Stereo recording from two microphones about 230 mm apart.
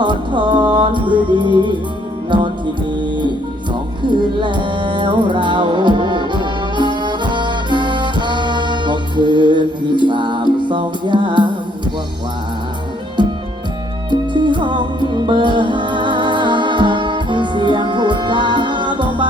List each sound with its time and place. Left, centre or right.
0.0 s music: centre
4.4 s music: centre
14.1 s music: centre